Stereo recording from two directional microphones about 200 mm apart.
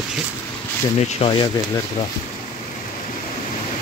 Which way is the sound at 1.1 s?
30° left (ahead or behind).